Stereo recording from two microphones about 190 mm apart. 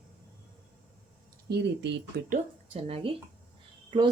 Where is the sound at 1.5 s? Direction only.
65° right (ahead or behind).